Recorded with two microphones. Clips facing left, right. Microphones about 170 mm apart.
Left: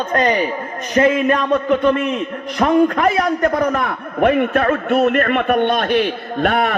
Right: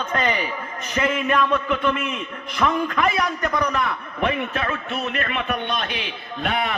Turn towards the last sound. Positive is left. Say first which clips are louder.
# left 8 dB
turn(degrees=50)  # may be behind; listen again after turning